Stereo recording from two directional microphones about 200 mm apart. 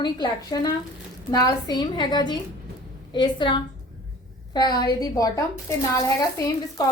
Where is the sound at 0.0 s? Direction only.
20° left (ahead or behind).